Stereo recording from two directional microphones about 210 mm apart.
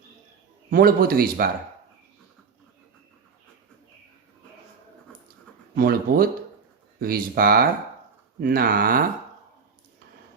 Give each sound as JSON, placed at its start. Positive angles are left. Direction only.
{"t": 0.7, "sound": "a man's voice", "side_deg": -45}
{"t": 5.7, "sound": "a man's voice", "side_deg": -45}